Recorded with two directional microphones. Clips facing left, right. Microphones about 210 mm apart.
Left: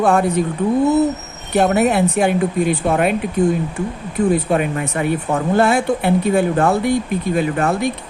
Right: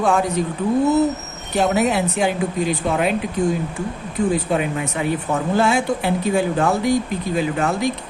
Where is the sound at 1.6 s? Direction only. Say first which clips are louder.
Left 3 dB; 55° left (ahead or behind).